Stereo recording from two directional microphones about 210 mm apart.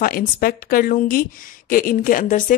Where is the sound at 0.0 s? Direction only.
45° left (ahead or behind).